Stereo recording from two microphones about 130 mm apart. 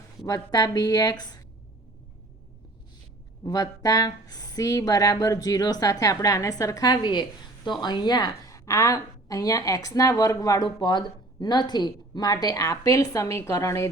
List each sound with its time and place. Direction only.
0.3 s speech: 25° left (ahead or behind)
3.4 s speech: 25° left (ahead or behind)